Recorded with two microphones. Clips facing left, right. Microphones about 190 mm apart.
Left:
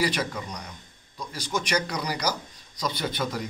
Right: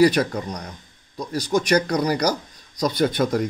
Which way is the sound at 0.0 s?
40° right (ahead or behind).